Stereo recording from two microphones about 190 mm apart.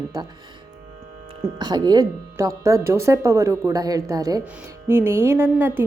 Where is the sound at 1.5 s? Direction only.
20° right (ahead or behind).